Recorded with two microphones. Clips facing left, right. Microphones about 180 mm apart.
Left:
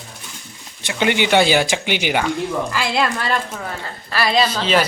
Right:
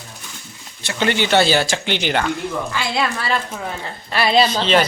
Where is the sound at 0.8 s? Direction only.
15° left (ahead or behind); by 3.6 s 10° right (ahead or behind).